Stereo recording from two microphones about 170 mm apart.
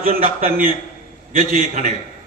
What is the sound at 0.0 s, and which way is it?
A man's voice, 55° right (ahead or behind).